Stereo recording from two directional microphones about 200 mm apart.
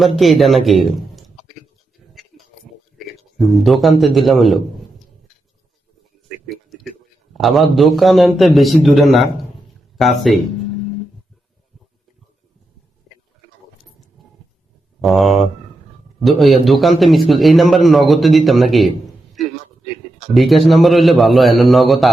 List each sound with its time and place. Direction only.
0.2 s a man's voice: centre (ahead or behind)
3.0 s a man's voice: centre (ahead or behind)
6.2 s a sound: centre (ahead or behind)
7.3 s a man's voice: centre (ahead or behind)
13.1 s a sound: centre (ahead or behind)
15.0 s a man's voice: centre (ahead or behind)